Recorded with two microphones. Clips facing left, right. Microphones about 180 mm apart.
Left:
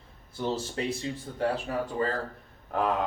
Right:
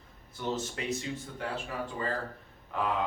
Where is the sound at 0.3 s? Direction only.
30° left (ahead or behind).